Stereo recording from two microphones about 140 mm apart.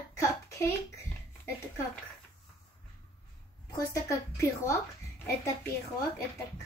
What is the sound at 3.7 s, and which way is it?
A woman's voice, 20° left (ahead or behind).